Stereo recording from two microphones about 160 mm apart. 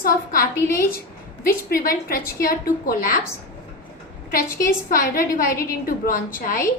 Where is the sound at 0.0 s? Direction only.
60° left (ahead or behind).